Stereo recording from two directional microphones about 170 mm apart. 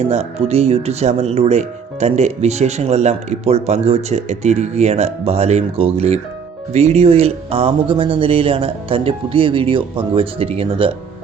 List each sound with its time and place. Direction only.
0.0 s speech: 40° right (ahead or behind)